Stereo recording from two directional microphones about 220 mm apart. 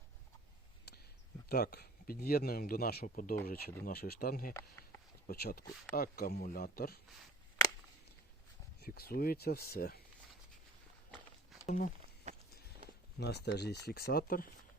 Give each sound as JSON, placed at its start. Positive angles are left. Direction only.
{"t": 0.9, "sound": "a sound", "side_deg": 50}
{"t": 1.5, "sound": "speech", "side_deg": 45}
{"t": 8.8, "sound": "speech", "side_deg": 45}
{"t": 11.6, "sound": "speech", "side_deg": 40}
{"t": 13.1, "sound": "speech", "side_deg": 50}